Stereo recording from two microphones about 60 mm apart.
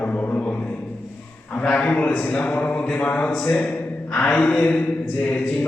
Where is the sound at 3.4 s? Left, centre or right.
Left.